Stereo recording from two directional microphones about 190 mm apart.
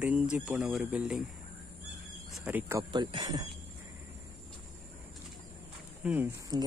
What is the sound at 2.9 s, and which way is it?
Speech, 25° right (ahead or behind).